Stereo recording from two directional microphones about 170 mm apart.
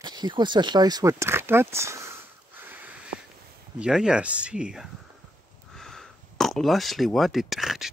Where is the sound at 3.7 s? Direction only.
5° right (ahead or behind).